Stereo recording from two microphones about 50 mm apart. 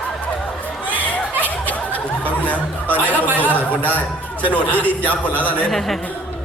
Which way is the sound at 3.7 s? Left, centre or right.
Left.